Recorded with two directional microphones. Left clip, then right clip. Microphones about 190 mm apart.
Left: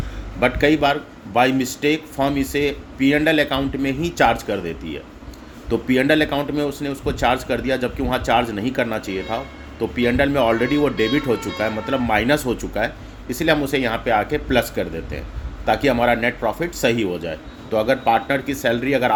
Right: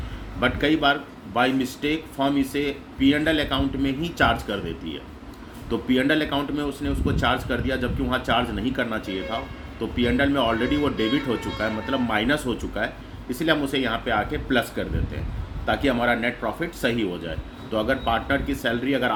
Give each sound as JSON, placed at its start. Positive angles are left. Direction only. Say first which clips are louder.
{"t": 0.3, "sound": "a man's voice", "louder": "left 5 dB", "side_deg": 40}
{"t": 5.6, "sound": "a man's voice", "louder": "left 5 dB", "side_deg": 40}